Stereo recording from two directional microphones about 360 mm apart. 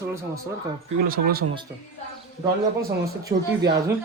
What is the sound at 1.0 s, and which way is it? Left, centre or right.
Speech, right.